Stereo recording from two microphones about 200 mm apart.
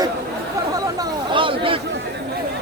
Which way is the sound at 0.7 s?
20° right (ahead or behind).